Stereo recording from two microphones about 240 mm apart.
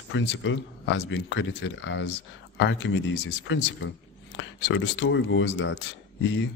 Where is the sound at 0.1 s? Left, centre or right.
Left.